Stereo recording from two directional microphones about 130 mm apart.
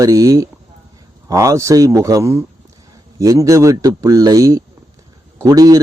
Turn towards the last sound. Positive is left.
turn(degrees=-30)  # may be behind; listen again after turning